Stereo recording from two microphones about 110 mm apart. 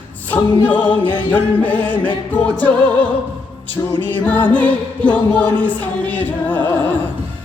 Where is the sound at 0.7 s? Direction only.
45° left (ahead or behind).